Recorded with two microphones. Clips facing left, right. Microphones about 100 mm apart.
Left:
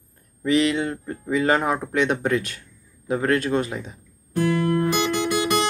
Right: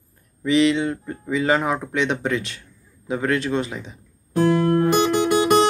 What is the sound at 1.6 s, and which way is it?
Speech, 15° left (ahead or behind).